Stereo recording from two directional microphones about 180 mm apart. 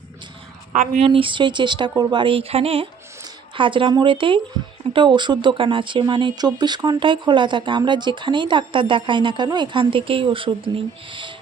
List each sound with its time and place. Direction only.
0.7 s speech: 45° right (ahead or behind)
1.0 s speech: 30° right (ahead or behind)